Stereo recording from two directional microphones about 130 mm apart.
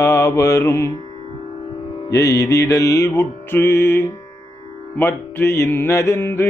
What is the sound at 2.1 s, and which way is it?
Music, 25° left (ahead or behind).